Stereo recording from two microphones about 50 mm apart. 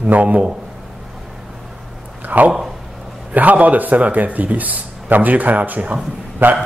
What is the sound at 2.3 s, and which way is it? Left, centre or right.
Speech, right.